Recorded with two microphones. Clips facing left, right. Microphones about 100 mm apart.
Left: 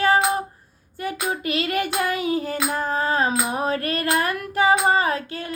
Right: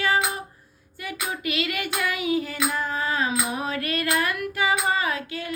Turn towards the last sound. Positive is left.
turn(degrees=35)  # may be behind; listen again after turning